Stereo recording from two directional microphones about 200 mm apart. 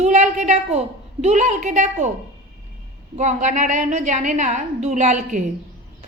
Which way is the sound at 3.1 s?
35° right (ahead or behind).